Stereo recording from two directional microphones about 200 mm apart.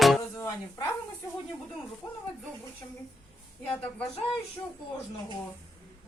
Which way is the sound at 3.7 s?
5° left (ahead or behind).